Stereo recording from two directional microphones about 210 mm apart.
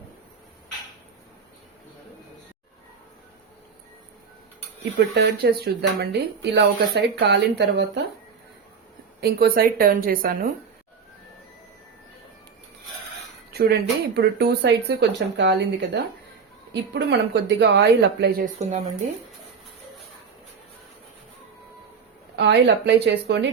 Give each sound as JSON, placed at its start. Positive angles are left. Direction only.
{"t": 5.1, "sound": "speech", "side_deg": -50}
{"t": 9.2, "sound": "speech", "side_deg": -45}
{"t": 13.5, "sound": "speech", "side_deg": -50}
{"t": 22.4, "sound": "speech", "side_deg": -55}